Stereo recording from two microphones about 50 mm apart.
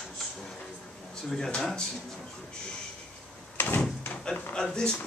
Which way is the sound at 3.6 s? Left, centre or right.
Left.